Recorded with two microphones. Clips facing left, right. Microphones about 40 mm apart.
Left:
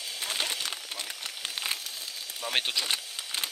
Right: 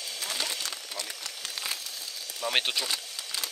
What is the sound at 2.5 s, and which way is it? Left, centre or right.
Speech, centre.